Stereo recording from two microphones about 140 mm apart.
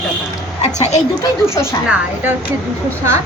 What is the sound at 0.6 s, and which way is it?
Speech, 55° left (ahead or behind).